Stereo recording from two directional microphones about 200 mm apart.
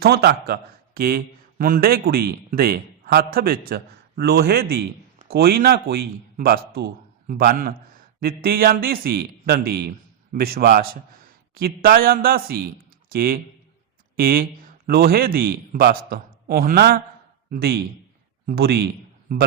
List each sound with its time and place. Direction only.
0.0 s a man's voice: 55° right (ahead or behind)